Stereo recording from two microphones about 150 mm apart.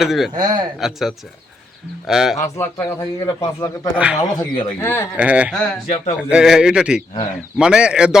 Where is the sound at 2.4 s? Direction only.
20° left (ahead or behind).